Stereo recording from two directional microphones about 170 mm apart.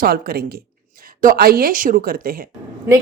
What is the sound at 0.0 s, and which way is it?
Speech, 60° right (ahead or behind).